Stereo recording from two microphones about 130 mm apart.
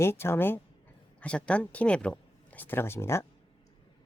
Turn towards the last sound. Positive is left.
turn(degrees=20)  # may be behind; listen again after turning